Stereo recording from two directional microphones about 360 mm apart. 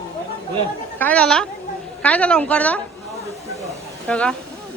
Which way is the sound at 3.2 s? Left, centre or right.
Centre.